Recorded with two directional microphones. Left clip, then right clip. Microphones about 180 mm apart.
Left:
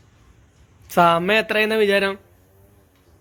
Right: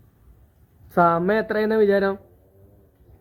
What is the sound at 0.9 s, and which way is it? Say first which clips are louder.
Speech: left 3 dB; 20° left (ahead or behind).